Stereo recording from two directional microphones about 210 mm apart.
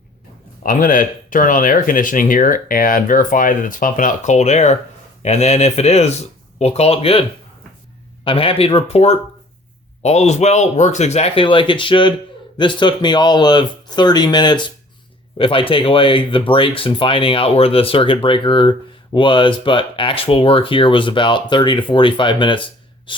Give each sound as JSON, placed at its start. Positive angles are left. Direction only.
{"t": 0.6, "sound": "speech", "side_deg": 40}